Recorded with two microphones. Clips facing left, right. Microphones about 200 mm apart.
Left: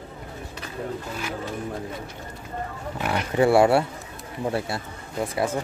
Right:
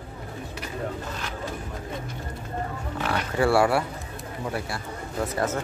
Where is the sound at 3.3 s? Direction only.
20° left (ahead or behind).